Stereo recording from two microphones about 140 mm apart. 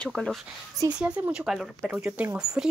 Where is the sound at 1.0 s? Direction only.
10° right (ahead or behind).